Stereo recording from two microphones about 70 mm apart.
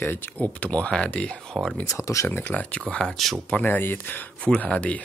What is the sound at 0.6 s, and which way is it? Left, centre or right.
Speech, centre.